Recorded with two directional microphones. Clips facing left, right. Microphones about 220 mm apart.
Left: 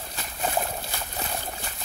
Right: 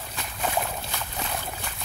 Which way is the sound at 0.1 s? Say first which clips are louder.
Even; 35° left (ahead or behind).